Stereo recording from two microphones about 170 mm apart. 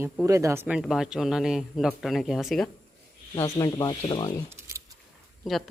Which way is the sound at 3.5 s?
20° left (ahead or behind).